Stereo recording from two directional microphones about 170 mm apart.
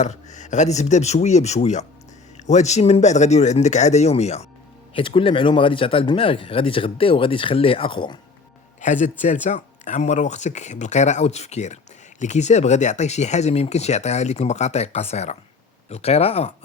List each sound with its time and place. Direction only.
0.0 s speech: 45° left (ahead or behind); by 8.2 s 25° left (ahead or behind)
8.8 s speech: 45° left (ahead or behind)